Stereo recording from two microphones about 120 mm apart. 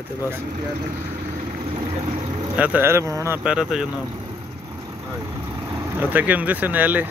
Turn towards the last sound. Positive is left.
turn(degrees=-15)  # may be behind; listen again after turning